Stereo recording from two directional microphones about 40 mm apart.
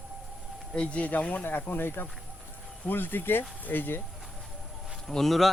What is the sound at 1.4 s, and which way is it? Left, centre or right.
Speech, left.